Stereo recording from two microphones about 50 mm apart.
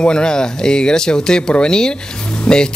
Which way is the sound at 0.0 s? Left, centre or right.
Centre.